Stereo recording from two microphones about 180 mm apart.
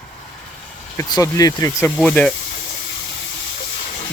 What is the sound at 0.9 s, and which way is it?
Speech, 20° left (ahead or behind).